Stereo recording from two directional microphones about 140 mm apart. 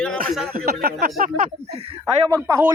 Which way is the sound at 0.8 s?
85° right.